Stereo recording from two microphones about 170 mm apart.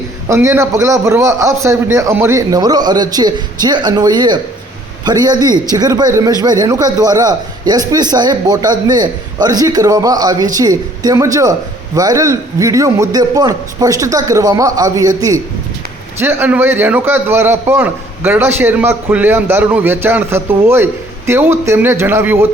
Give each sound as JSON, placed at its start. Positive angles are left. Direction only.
{"t": 0.3, "sound": "a man's voice", "side_deg": -15}